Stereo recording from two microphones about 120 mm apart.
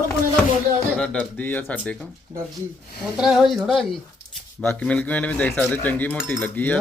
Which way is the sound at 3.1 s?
5° right (ahead or behind).